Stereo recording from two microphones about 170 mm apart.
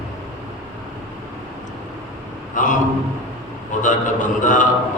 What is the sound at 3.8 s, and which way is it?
Speech, 50° left (ahead or behind).